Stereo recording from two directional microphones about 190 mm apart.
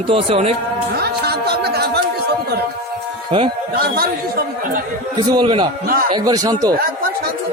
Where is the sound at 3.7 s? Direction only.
55° right (ahead or behind).